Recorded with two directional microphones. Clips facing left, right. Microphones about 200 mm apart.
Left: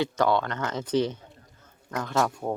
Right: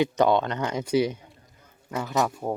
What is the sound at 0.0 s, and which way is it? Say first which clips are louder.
Speech: right 3 dB; 20° right (ahead or behind).